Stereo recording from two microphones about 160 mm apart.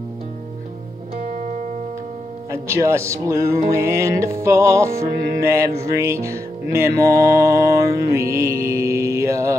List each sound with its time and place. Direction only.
1.2 s music: 50° right (ahead or behind)
2.5 s music: 15° right (ahead or behind)